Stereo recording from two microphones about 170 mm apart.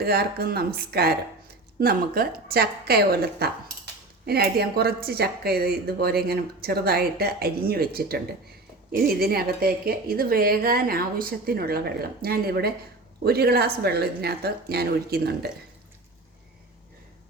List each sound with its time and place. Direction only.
0.0 s a woman's voice: 65° right (ahead or behind)